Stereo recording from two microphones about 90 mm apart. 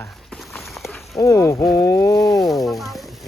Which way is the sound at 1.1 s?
35° left (ahead or behind).